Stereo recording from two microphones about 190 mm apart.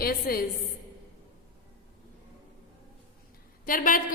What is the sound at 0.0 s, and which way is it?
Speech, 50° left (ahead or behind).